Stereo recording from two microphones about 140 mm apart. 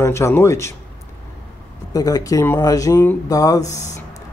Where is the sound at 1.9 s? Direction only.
25° left (ahead or behind).